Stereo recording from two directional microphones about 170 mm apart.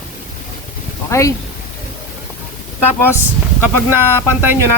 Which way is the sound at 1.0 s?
15° left (ahead or behind).